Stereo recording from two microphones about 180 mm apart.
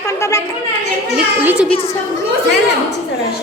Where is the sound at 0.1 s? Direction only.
15° left (ahead or behind).